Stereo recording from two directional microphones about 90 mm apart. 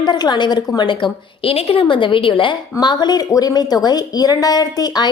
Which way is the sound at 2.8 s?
50° left (ahead or behind).